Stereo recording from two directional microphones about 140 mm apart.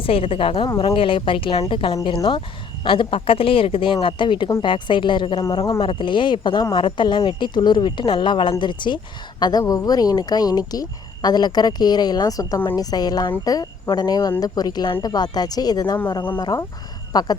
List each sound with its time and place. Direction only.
0.0 s speech: 40° left (ahead or behind)